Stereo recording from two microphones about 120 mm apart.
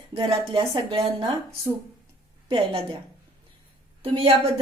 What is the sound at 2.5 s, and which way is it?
Speech, 45° right (ahead or behind).